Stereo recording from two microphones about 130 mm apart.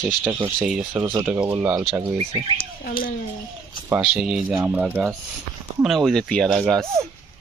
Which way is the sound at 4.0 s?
5° right (ahead or behind).